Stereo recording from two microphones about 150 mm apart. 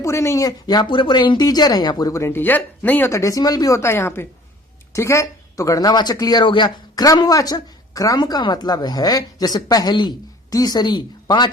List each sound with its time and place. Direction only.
0.0 s speech: 20° left (ahead or behind)